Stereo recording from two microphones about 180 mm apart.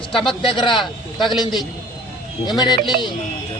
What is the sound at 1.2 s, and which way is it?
Speech, centre (ahead or behind).